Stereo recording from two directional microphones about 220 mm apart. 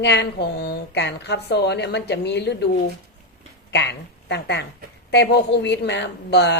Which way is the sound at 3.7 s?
50° left (ahead or behind).